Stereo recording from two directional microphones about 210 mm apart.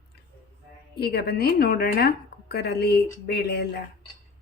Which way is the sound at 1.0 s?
50° left (ahead or behind).